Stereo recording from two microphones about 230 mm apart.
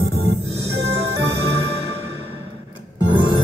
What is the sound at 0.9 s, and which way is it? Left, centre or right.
Music, right.